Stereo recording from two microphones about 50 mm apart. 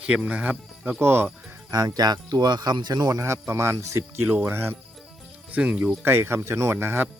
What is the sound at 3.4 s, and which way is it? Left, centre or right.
Speech, right.